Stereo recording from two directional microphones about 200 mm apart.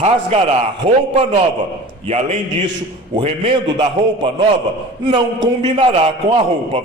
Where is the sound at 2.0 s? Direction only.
35° right (ahead or behind).